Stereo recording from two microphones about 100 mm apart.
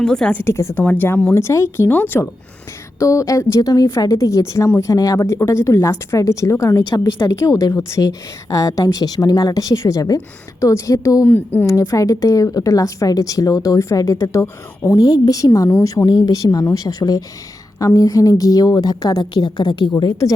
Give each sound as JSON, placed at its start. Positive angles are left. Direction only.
{"t": 0.0, "sound": "a woman's voice", "side_deg": 10}
{"t": 0.4, "sound": "a woman's voice", "side_deg": 25}
{"t": 11.3, "sound": "a woman's voice", "side_deg": 20}
{"t": 11.6, "sound": "a woman's voice", "side_deg": 30}
{"t": 15.0, "sound": "a woman's voice", "side_deg": 40}
{"t": 15.7, "sound": "speech", "side_deg": 25}
{"t": 16.2, "sound": "a woman's voice", "side_deg": 40}
{"t": 19.9, "sound": "a woman's voice", "side_deg": 35}